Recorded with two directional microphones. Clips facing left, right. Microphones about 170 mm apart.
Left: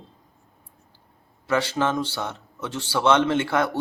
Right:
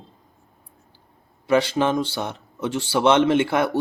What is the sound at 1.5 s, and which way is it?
Speech, 15° right (ahead or behind).